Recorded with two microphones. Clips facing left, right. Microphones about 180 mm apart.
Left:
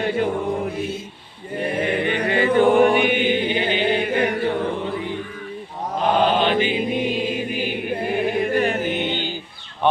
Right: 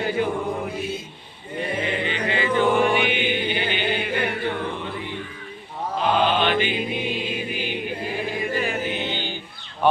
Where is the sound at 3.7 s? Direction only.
30° left (ahead or behind).